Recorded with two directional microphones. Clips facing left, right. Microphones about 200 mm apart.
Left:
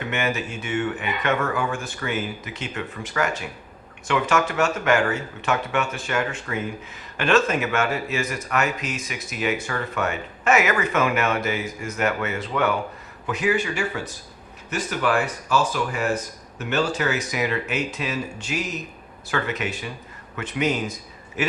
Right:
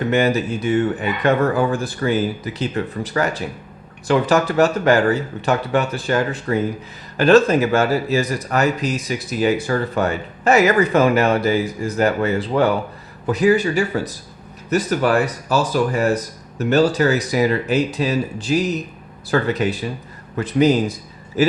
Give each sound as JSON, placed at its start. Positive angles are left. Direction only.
{"t": 0.0, "sound": "speech", "side_deg": -35}